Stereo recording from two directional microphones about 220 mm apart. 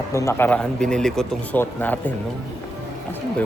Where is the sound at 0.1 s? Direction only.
15° left (ahead or behind).